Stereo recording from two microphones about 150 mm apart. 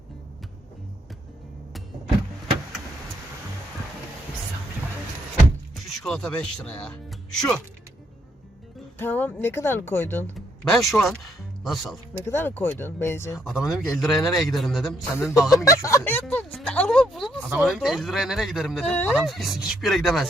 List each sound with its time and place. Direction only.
5.7 s speech: centre (ahead or behind)
9.0 s speech: 15° left (ahead or behind)
10.3 s speech: centre (ahead or behind)
12.2 s speech: 15° left (ahead or behind)
13.4 s speech: 5° right (ahead or behind)
15.1 s speech: 20° left (ahead or behind)
15.4 s speech: centre (ahead or behind)
15.6 s speech: 20° left (ahead or behind); by 20.2 s centre (ahead or behind)